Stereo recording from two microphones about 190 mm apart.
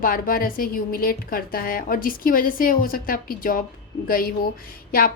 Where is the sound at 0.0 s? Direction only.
50° left (ahead or behind).